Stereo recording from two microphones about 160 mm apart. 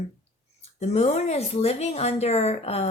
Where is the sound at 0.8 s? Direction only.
40° left (ahead or behind).